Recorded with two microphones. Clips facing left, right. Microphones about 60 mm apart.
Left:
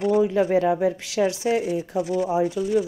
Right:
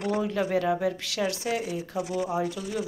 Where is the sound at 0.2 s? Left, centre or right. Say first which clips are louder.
Left 7 dB; centre.